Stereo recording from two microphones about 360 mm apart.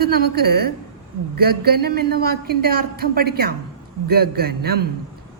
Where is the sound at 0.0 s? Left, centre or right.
Right.